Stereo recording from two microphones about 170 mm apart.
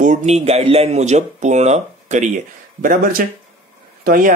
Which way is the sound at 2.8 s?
55° right (ahead or behind).